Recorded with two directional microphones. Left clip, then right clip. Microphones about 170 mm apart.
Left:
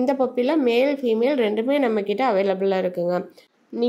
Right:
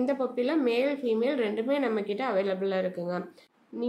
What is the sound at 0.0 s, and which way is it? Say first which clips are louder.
Speech: left 7 dB; 35° left (ahead or behind).